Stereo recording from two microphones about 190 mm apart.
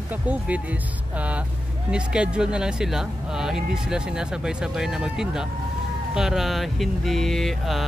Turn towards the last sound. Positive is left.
turn(degrees=0)  # may be behind; listen again after turning